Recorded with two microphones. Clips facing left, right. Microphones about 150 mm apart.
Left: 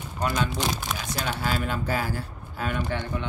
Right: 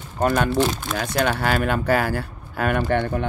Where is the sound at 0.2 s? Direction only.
55° right (ahead or behind).